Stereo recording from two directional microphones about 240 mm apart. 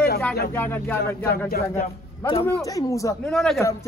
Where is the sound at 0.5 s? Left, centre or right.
Centre.